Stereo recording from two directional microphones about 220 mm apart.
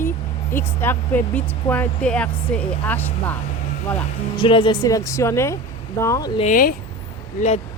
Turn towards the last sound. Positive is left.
turn(degrees=30)  # may be behind; listen again after turning